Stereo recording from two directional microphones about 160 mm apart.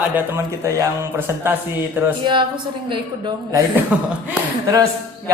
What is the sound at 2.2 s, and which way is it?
Speech, 30° right (ahead or behind).